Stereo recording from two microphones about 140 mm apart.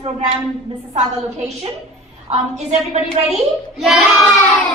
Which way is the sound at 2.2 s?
50° right (ahead or behind).